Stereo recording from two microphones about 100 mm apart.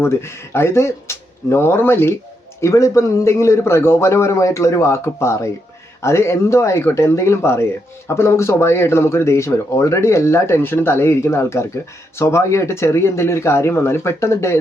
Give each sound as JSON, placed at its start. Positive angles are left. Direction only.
{"t": 0.0, "sound": "speech", "side_deg": 25}